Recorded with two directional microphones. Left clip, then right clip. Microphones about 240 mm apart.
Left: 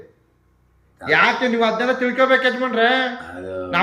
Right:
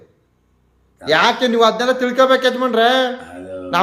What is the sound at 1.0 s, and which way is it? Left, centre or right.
Speech, centre.